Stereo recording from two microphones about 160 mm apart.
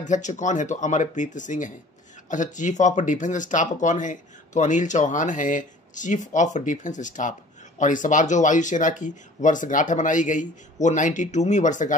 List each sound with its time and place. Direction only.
0.0 s speech: 50° left (ahead or behind)